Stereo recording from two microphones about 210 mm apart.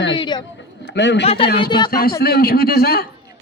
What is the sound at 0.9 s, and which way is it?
Speech, 55° left (ahead or behind).